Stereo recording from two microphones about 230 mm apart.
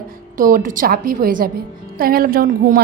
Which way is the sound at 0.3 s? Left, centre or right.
Right.